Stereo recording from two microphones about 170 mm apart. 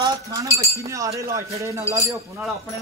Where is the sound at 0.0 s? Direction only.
20° right (ahead or behind).